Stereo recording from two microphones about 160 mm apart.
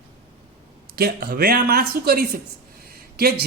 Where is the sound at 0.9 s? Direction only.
75° right (ahead or behind).